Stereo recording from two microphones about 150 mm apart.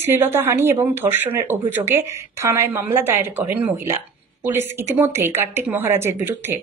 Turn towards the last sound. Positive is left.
turn(degrees=-15)  # may be behind; listen again after turning